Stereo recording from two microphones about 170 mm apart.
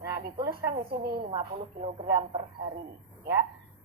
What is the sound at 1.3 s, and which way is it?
Speech, 30° right (ahead or behind).